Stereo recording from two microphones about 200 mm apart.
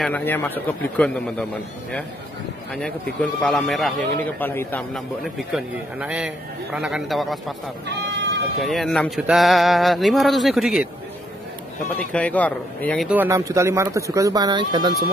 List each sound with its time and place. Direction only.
0.0 s a man's voice: 10° left (ahead or behind)
2.7 s a man's voice: centre (ahead or behind)
7.8 s a sound: 60° right (ahead or behind)
8.5 s a man's voice: centre (ahead or behind)
12.1 s a man's voice: 5° left (ahead or behind)
13.1 s speech: 10° right (ahead or behind)